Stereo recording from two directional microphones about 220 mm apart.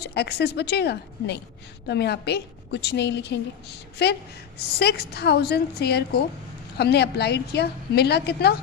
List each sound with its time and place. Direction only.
0.0 s a woman's voice: 50° left (ahead or behind)